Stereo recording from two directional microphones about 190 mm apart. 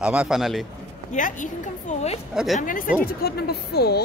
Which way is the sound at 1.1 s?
40° left (ahead or behind).